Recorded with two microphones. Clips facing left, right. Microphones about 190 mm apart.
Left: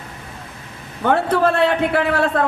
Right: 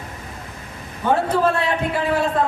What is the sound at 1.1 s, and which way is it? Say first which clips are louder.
A woman's voice: left 2 dB; 65° left (ahead or behind).